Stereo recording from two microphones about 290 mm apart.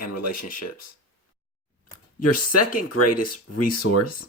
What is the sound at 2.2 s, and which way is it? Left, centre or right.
Speech, left.